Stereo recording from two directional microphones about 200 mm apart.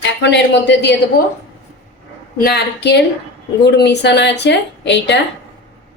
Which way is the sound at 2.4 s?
55° left (ahead or behind).